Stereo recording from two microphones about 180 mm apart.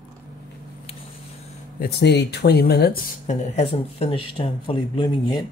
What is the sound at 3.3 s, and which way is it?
Speech, 40° left (ahead or behind).